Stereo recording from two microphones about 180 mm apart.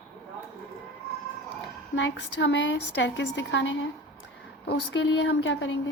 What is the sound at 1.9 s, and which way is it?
A woman's voice, 85° left.